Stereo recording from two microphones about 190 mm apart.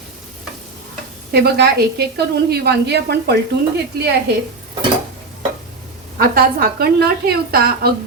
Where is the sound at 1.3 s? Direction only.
60° right (ahead or behind).